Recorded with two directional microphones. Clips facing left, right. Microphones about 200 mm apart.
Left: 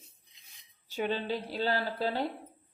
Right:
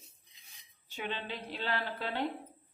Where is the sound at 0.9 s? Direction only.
40° left (ahead or behind).